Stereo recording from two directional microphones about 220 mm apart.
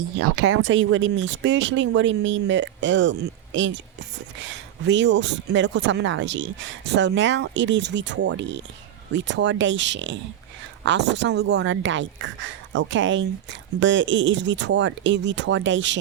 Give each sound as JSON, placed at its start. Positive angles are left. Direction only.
{"t": 0.4, "sound": "speech", "side_deg": -60}